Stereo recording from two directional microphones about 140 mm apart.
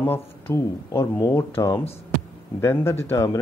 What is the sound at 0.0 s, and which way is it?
Speech, 15° left (ahead or behind).